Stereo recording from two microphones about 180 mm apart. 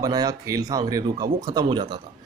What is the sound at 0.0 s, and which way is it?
Speech, 20° right (ahead or behind).